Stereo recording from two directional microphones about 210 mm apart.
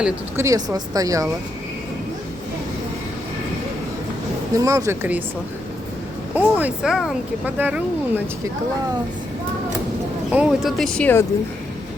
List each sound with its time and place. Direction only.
0.0 s speech: 15° right (ahead or behind)
4.5 s speech: 15° right (ahead or behind)
6.3 s speech: 10° right (ahead or behind)
10.3 s speech: centre (ahead or behind)